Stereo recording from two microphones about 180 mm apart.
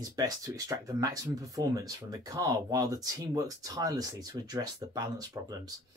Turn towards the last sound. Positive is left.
turn(degrees=-20)  # may be behind; listen again after turning